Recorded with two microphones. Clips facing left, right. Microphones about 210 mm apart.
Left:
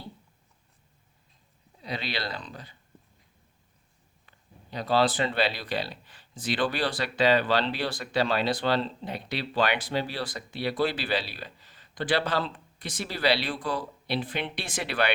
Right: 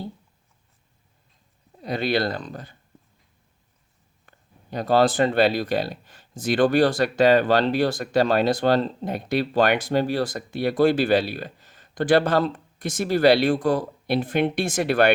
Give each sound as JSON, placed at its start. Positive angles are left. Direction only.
{"t": 1.8, "sound": "speech", "side_deg": -50}
{"t": 4.3, "sound": "speech", "side_deg": -50}